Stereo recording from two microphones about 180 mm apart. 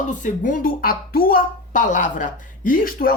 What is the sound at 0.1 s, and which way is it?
Speech, 45° left (ahead or behind).